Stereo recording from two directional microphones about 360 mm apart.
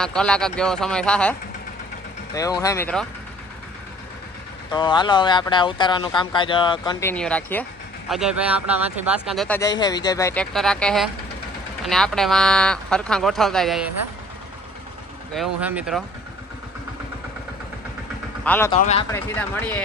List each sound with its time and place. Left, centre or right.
0.0 s speech: centre
4.7 s speech: centre
15.4 s speech: centre
18.4 s speech: centre
18.8 s speech: centre
19.1 s speech: centre